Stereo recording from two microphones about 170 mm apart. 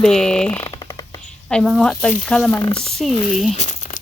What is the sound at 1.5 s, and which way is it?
Speech, centre (ahead or behind).